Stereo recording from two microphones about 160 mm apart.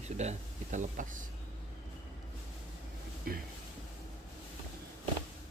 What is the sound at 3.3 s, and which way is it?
Speech, 65° right (ahead or behind).